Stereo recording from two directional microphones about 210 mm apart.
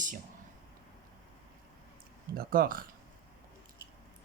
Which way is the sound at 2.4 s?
45° right (ahead or behind).